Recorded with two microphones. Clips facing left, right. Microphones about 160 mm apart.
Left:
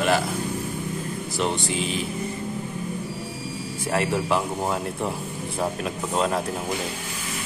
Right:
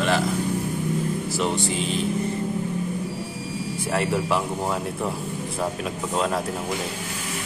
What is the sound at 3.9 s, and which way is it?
Speech, centre (ahead or behind).